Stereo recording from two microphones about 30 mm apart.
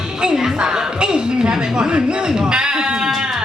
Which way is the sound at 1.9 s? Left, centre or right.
Right.